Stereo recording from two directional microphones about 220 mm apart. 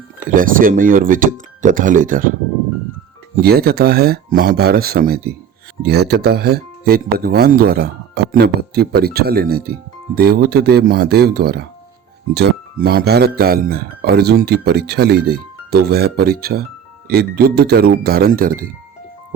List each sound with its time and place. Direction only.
0.2 s speech: 40° right (ahead or behind)
3.4 s speech: 45° right (ahead or behind)